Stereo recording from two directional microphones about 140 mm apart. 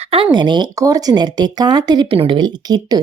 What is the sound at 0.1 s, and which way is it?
Speech, 35° right (ahead or behind).